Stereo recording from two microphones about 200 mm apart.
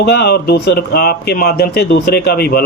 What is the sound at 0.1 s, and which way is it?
Speech, 55° left (ahead or behind).